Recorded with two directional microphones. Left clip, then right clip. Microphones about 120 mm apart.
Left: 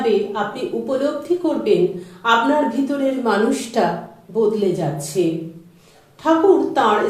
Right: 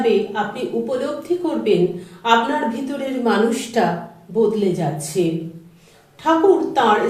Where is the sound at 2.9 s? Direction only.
20° left (ahead or behind).